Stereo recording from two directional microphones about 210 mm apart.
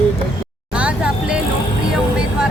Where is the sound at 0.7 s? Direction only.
5° right (ahead or behind).